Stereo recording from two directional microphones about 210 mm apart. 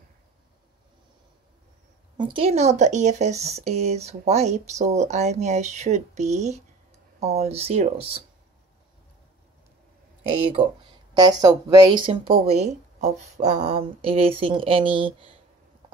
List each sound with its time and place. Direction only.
2.1 s speech: 25° right (ahead or behind)
11.1 s speech: 20° right (ahead or behind)